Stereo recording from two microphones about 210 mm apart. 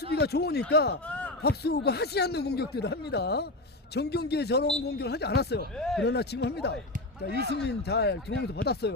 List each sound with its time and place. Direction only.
0.1 s speech: 50° left (ahead or behind)
1.0 s a sound: 5° left (ahead or behind)
1.4 s speech: 50° left (ahead or behind)
5.7 s speech: centre (ahead or behind)
6.0 s speech: 50° left (ahead or behind)